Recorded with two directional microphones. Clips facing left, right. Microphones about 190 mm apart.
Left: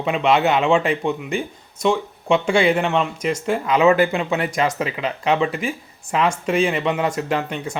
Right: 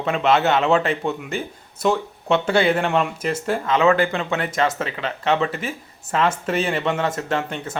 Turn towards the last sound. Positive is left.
turn(degrees=5)  # may be behind; listen again after turning